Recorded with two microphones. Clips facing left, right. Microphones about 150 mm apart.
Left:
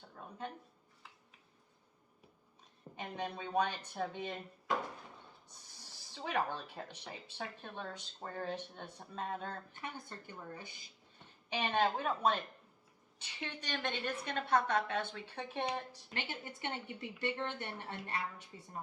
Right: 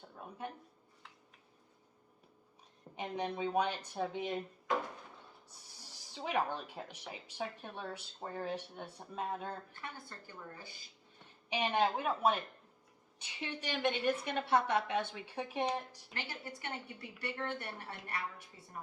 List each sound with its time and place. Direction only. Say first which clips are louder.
2.9 s speech: right 3 dB; 15° right (ahead or behind)
5.8 s speech: right 2 dB; 10° right (ahead or behind)
9.7 s a woman's voice: left 2 dB; 20° left (ahead or behind)
11.4 s speech: right 1 dB; 15° right (ahead or behind)
16.1 s a woman's voice: left 1 dB; 20° left (ahead or behind)